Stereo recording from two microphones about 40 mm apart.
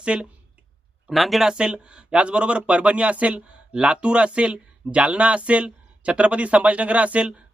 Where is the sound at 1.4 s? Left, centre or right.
Right.